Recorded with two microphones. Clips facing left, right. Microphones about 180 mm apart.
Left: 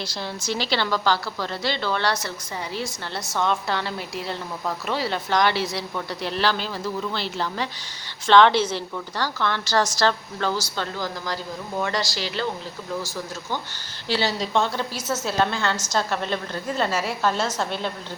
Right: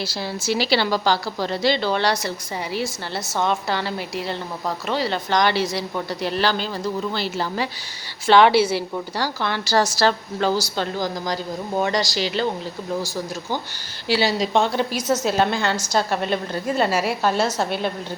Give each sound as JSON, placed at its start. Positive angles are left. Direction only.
{"t": 0.0, "sound": "a woman's voice", "side_deg": -5}
{"t": 14.1, "sound": "a woman's voice", "side_deg": -10}